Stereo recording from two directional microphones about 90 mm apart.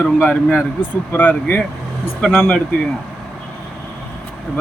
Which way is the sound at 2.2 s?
Centre (ahead or behind).